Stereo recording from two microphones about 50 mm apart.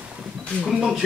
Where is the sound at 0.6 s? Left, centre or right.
Centre.